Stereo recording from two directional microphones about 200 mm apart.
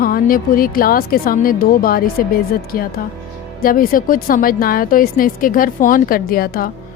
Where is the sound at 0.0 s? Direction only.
45° left (ahead or behind).